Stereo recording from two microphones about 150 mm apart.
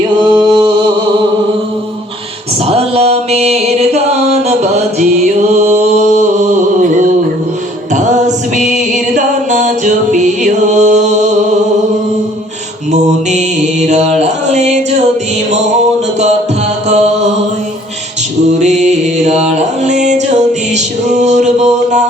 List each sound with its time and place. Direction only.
0.2 s a sound: 30° right (ahead or behind)
2.6 s music: 45° right (ahead or behind)
7.9 s music: 55° right (ahead or behind)
12.9 s mantra: 50° right (ahead or behind)
16.9 s mantra: 50° right (ahead or behind)
18.6 s music: 50° right (ahead or behind)